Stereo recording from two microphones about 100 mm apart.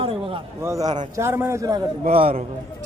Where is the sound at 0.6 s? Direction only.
30° right (ahead or behind).